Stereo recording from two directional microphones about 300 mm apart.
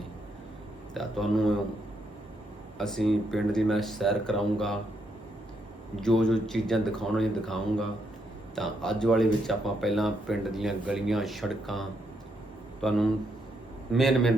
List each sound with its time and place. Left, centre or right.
0.9 s speech: centre
2.7 s speech: centre
6.0 s a man's voice: centre